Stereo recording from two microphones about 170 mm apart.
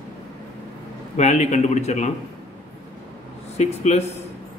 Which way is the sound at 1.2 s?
40° left (ahead or behind).